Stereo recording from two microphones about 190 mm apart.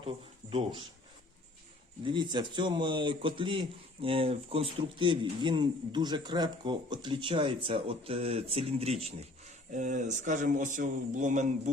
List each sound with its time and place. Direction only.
0.0 s speech: 30° right (ahead or behind)
2.0 s a man's voice: 25° right (ahead or behind); by 11.7 s 40° right (ahead or behind)